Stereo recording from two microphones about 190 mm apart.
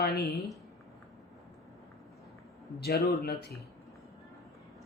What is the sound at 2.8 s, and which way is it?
Speech, 55° left (ahead or behind).